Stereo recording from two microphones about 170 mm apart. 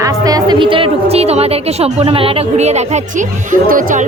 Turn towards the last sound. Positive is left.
turn(degrees=-55)  # may be behind; listen again after turning